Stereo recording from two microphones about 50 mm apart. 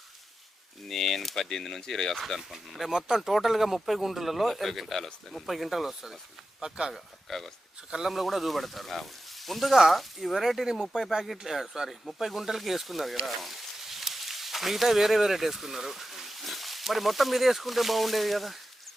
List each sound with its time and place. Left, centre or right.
0.9 s speech: centre
6.9 s speech: centre
7.9 s speech: centre
8.1 s speech: centre